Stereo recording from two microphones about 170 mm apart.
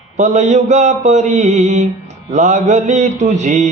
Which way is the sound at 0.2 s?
45° right (ahead or behind).